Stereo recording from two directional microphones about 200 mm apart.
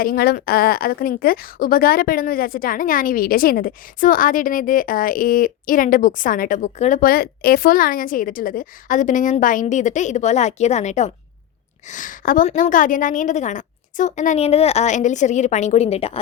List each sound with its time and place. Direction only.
0.0 s a woman's voice: 50° left (ahead or behind); by 16.1 s 30° left (ahead or behind)